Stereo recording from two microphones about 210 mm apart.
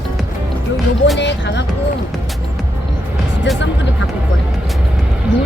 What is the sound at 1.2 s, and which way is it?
Music, 55° left (ahead or behind).